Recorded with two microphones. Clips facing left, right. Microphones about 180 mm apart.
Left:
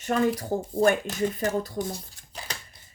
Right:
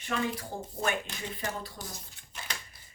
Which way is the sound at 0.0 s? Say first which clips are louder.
Left 8 dB; 45° left (ahead or behind).